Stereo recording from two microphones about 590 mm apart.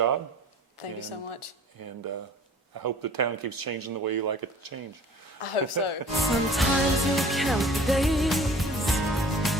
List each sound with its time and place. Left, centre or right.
0.8 s speech: left
1.8 s speech: right
5.4 s a woman's voice: left
6.1 s music: centre